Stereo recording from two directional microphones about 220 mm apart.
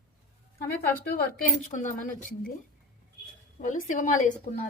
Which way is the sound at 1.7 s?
35° left (ahead or behind).